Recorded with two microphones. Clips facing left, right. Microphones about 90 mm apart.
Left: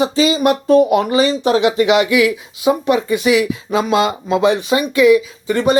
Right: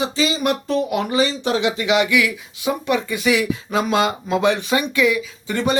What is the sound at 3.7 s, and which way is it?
Speech, 35° left (ahead or behind).